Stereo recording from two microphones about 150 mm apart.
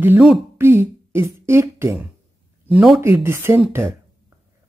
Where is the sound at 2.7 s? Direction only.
5° right (ahead or behind).